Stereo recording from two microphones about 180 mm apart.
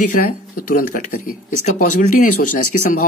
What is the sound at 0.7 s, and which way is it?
A man's voice, 50° left (ahead or behind).